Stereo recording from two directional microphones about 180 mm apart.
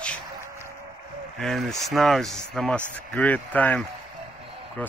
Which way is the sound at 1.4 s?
Centre (ahead or behind).